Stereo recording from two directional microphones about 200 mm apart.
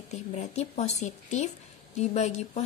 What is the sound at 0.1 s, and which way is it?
Speech, 35° left (ahead or behind).